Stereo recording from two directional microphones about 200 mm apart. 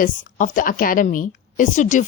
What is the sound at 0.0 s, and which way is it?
A woman's voice, 40° left (ahead or behind).